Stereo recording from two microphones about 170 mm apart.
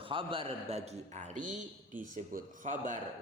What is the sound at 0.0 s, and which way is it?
A man's voice, 30° right (ahead or behind).